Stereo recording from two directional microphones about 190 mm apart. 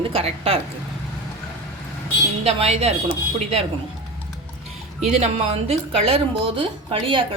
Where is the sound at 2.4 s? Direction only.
35° right (ahead or behind).